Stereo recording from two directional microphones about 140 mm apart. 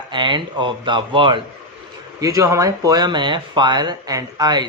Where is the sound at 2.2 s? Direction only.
20° right (ahead or behind).